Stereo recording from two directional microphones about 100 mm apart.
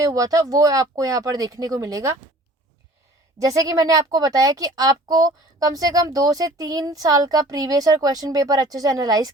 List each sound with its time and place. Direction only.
0.0 s a woman's voice: 35° right (ahead or behind)
3.3 s a woman's voice: 35° right (ahead or behind)